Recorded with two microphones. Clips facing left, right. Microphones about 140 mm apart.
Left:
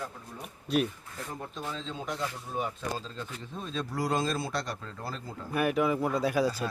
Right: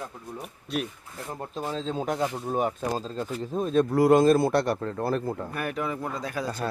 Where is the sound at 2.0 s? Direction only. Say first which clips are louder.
Right 6 dB; 50° right (ahead or behind).